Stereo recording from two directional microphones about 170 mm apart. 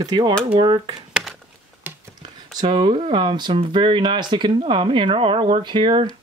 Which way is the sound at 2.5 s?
25° right (ahead or behind).